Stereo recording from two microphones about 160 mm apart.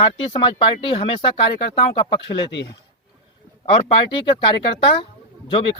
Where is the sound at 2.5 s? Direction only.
90° left.